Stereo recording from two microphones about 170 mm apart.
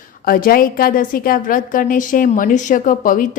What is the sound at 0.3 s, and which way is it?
A woman's voice, 60° left (ahead or behind).